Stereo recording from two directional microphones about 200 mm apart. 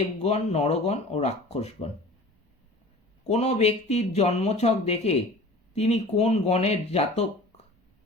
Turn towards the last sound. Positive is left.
turn(degrees=30)  # may be behind; listen again after turning